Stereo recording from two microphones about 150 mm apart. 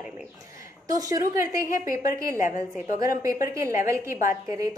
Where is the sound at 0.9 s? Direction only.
20° right (ahead or behind).